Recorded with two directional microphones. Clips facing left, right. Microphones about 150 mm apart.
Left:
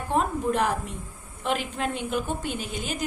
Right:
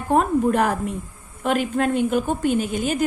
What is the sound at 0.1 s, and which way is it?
A woman's voice, 50° right (ahead or behind).